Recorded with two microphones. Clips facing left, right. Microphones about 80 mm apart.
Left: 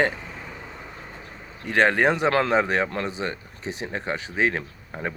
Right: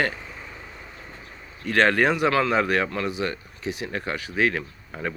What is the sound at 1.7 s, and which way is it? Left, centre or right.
Speech, centre.